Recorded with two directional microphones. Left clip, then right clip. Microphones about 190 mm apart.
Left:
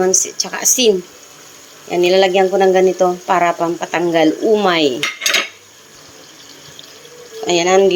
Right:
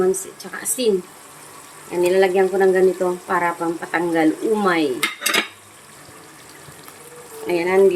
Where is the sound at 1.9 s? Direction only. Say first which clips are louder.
Left 5 dB; 25° left (ahead or behind).